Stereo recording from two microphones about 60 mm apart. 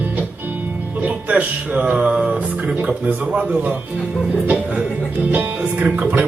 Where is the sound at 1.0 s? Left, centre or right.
Right.